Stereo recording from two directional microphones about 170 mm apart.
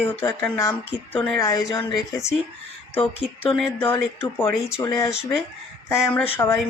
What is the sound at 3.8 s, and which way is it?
Speech, 10° left (ahead or behind).